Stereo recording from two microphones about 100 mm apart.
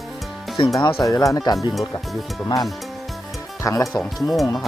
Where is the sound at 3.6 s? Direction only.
35° left (ahead or behind).